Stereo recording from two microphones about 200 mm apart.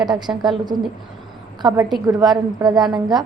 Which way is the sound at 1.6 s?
15° right (ahead or behind).